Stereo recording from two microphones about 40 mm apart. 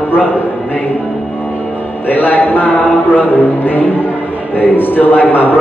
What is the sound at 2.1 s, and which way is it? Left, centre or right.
A man's voice, left.